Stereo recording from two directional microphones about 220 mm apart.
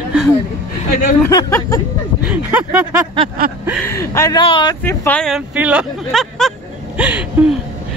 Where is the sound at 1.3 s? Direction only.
15° left (ahead or behind).